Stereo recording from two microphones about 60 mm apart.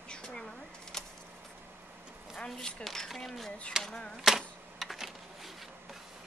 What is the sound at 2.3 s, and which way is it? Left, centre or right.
Speech, centre.